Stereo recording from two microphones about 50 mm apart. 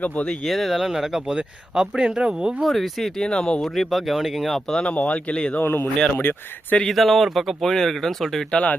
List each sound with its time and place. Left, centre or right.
0.4 s speech: centre; by 2.6 s right
2.6 s speech: centre
3.2 s speech: centre
4.7 s speech: left
5.6 s speech: left
6.8 s speech: centre